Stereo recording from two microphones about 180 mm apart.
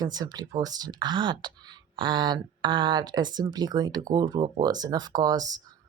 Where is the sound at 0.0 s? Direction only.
20° right (ahead or behind).